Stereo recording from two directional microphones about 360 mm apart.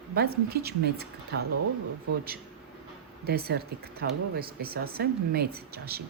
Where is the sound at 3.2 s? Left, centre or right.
Right.